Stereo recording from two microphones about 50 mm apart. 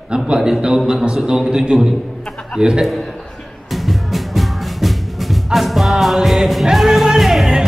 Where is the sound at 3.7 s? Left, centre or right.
Centre.